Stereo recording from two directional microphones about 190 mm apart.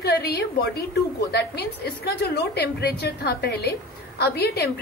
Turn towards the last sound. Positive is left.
turn(degrees=60)  # may be behind; listen again after turning